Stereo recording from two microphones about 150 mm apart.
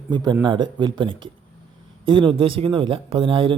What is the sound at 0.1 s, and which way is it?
A man's voice, 30° right (ahead or behind).